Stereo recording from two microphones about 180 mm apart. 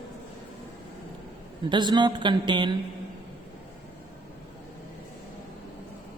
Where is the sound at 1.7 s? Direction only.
25° right (ahead or behind).